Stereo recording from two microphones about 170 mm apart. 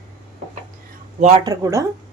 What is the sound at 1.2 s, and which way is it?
Speech, 40° right (ahead or behind).